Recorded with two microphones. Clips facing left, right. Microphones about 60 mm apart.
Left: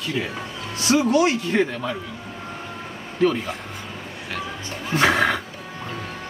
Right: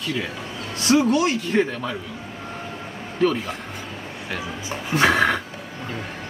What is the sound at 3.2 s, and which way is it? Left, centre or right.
Speech, centre.